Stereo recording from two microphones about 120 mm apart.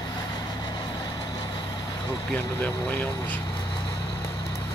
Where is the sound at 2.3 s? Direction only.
15° left (ahead or behind).